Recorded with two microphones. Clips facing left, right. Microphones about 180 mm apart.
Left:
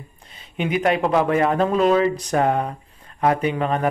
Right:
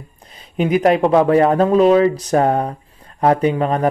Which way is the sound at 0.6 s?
40° right (ahead or behind).